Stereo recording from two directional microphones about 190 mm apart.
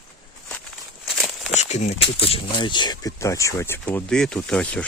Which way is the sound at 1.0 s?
Centre (ahead or behind).